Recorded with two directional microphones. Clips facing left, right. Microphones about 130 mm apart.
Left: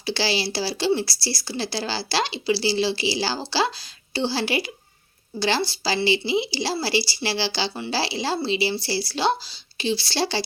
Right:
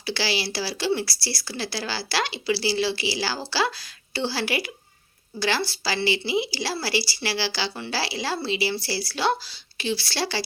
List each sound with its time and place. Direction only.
0.0 s a woman's voice: 25° left (ahead or behind)